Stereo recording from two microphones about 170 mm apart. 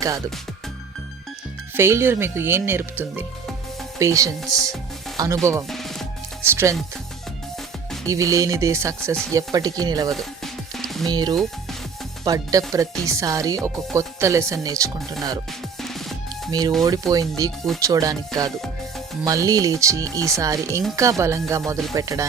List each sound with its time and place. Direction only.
1.7 s speech: 15° right (ahead or behind)
5.6 s music: centre (ahead or behind)
6.4 s speech: 15° right (ahead or behind)
8.0 s speech: 20° right (ahead or behind)
10.1 s music: centre (ahead or behind)
11.0 s speech: 25° right (ahead or behind)
15.8 s music: centre (ahead or behind)
16.5 s speech: 25° right (ahead or behind)
19.2 s speech: 20° right (ahead or behind)